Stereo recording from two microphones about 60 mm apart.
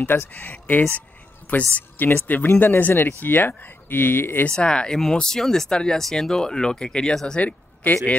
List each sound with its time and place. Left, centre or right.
0.3 s a woman's voice: left
4.5 s speech: centre
7.8 s speech: left